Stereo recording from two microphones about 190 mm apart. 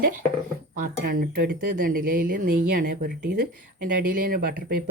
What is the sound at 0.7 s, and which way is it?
Speech, 50° right (ahead or behind).